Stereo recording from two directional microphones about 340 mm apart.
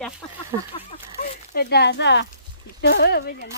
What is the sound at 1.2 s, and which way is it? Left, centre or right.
Speech, left.